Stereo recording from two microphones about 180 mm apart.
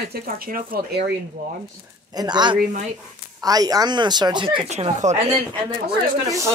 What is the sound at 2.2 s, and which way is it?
Speech, 25° right (ahead or behind).